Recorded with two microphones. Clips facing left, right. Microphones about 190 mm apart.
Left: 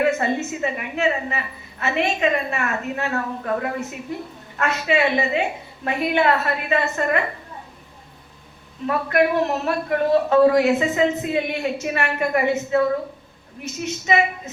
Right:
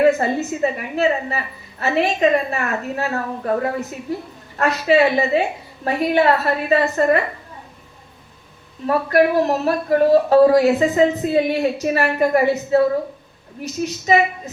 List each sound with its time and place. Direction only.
0.0 s a woman's voice: 35° right (ahead or behind)
8.9 s a woman's voice: 35° right (ahead or behind)